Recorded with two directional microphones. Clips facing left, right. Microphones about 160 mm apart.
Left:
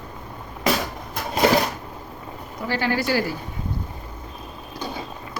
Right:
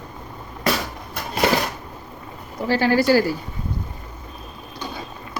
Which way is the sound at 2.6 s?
35° right (ahead or behind).